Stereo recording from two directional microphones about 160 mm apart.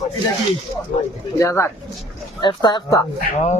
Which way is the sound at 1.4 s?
15° left (ahead or behind).